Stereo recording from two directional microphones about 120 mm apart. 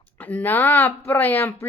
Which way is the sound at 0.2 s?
15° left (ahead or behind).